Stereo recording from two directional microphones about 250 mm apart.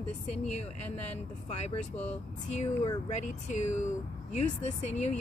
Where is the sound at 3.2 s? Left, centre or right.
Left.